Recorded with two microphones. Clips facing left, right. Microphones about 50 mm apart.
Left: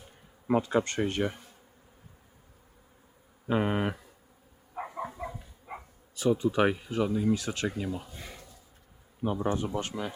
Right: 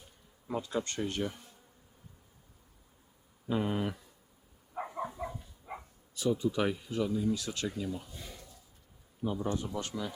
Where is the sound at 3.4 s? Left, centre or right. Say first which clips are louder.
Left 4 dB; left.